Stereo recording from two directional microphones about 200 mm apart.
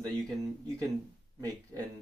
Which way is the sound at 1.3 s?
20° right (ahead or behind).